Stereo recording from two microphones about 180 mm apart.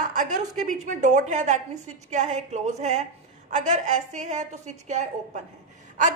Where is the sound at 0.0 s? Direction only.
45° right (ahead or behind).